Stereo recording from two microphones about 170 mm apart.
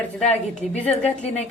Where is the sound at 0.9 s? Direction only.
40° left (ahead or behind).